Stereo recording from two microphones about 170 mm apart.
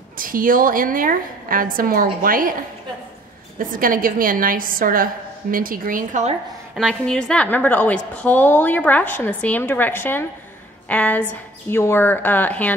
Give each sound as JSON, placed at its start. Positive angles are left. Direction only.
{"t": 0.2, "sound": "a woman's voice", "side_deg": -55}
{"t": 3.5, "sound": "a woman's voice", "side_deg": -55}
{"t": 6.7, "sound": "a woman's voice", "side_deg": 0}